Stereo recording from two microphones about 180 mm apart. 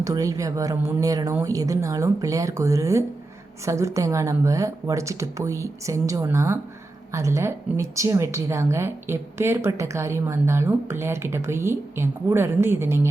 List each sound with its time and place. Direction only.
0.0 s a woman's voice: 20° right (ahead or behind)